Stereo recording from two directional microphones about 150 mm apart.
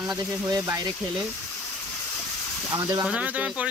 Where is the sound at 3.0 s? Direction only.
10° right (ahead or behind).